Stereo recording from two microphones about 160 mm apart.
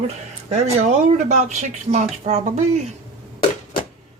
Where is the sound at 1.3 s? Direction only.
45° right (ahead or behind).